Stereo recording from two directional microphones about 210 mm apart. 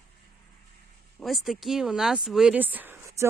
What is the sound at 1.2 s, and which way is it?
Speech, centre (ahead or behind).